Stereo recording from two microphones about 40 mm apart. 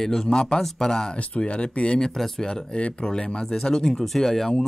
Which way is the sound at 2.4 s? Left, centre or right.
Centre.